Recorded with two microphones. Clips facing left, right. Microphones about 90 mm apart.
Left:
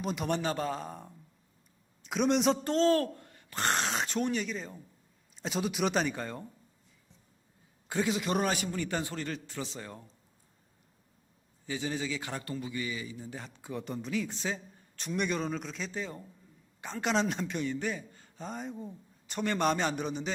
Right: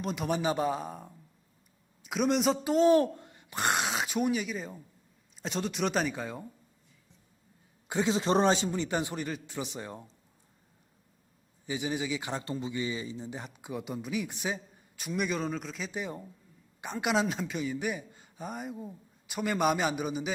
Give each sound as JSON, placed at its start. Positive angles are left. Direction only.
{"t": 0.0, "sound": "a man's voice", "side_deg": 0}
{"t": 5.4, "sound": "a man's voice", "side_deg": 5}
{"t": 7.9, "sound": "a man's voice", "side_deg": -20}
{"t": 8.1, "sound": "a man's voice", "side_deg": -30}
{"t": 11.6, "sound": "a man's voice", "side_deg": -15}
{"t": 15.9, "sound": "a man's voice", "side_deg": -15}